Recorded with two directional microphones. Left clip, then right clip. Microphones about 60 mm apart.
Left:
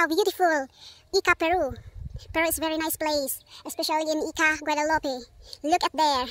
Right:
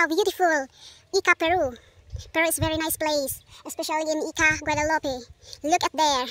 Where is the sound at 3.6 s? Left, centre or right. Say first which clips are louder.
Left 1 dB; left.